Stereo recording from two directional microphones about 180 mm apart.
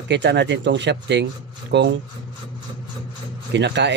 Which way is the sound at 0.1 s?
75° right (ahead or behind).